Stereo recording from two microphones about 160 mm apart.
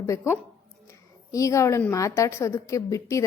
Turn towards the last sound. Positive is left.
turn(degrees=20)  # may be behind; listen again after turning